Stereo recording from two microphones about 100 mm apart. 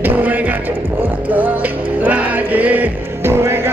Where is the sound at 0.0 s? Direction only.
20° right (ahead or behind).